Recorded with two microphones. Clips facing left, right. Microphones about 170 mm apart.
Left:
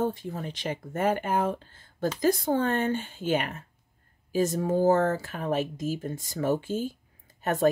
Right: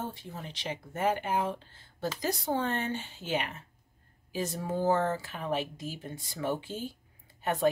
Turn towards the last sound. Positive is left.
turn(degrees=45)  # may be behind; listen again after turning